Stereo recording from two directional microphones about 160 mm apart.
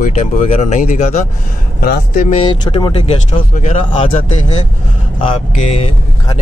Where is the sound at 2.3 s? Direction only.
35° left (ahead or behind).